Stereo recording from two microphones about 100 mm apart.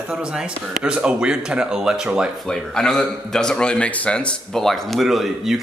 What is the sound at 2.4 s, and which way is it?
A man's voice, 5° left (ahead or behind).